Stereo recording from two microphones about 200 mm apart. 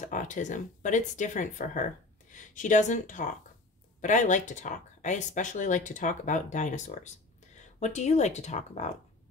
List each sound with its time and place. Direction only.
0.0 s speech: 40° left (ahead or behind)